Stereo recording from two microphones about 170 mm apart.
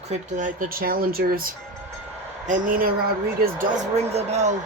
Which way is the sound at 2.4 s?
50° right (ahead or behind).